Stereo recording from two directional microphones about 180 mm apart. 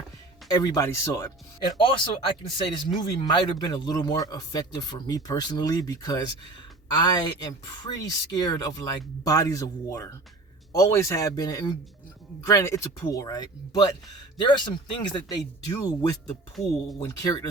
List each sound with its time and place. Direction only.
0.4 s speech: 20° left (ahead or behind)
1.8 s speech: 25° left (ahead or behind)